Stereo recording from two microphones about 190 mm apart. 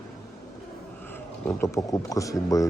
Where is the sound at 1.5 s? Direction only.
15° left (ahead or behind).